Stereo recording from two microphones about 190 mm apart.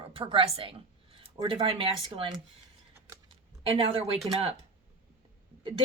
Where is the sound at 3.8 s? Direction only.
30° right (ahead or behind).